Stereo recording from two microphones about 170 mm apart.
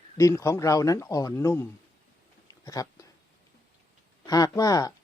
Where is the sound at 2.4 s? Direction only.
20° left (ahead or behind).